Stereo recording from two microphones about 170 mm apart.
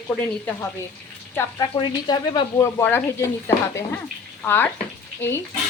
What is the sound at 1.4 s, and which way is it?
A woman's voice, 20° left (ahead or behind).